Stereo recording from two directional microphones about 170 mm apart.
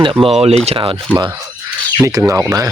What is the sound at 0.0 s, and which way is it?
Speech, 30° right (ahead or behind).